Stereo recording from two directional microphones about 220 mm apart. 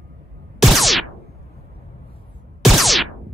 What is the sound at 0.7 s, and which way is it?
Music, centre (ahead or behind).